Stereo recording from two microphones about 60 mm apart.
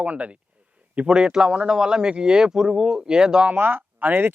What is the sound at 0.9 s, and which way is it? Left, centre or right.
A man's voice, centre.